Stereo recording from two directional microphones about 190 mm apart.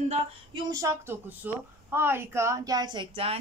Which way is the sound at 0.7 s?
15° right (ahead or behind).